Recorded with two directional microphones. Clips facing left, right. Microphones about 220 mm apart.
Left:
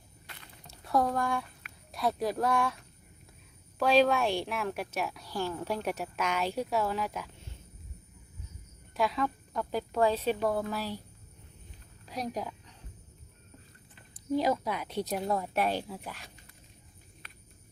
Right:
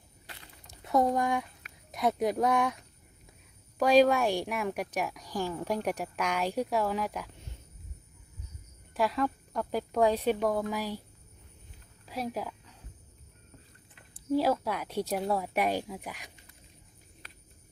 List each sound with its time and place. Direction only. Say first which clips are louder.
0.7 s speech: right 2 dB; 20° right (ahead or behind)
3.8 s a woman's voice: right 2 dB; 15° right (ahead or behind)
9.0 s a woman's voice: right 1 dB; 5° right (ahead or behind)
12.0 s a sound: right 1 dB; 5° right (ahead or behind)
14.3 s a woman's voice: right 1 dB; 5° right (ahead or behind)